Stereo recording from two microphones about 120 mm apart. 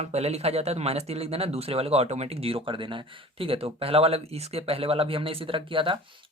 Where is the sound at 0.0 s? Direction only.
65° right (ahead or behind).